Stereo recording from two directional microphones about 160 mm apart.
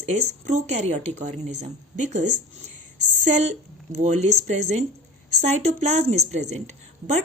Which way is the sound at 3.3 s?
45° right (ahead or behind).